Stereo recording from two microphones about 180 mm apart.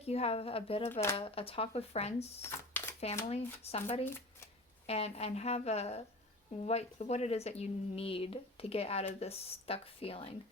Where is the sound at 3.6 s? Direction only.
35° left (ahead or behind).